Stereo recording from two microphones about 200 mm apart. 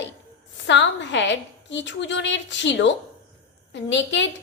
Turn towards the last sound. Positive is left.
turn(degrees=65)  # may be behind; listen again after turning